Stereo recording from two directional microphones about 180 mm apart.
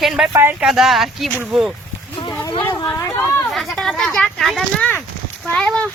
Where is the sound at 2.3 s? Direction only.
20° left (ahead or behind).